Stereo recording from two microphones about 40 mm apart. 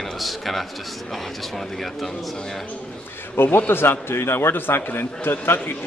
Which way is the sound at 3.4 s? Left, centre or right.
Left.